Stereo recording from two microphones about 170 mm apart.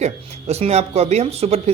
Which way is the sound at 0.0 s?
40° right (ahead or behind).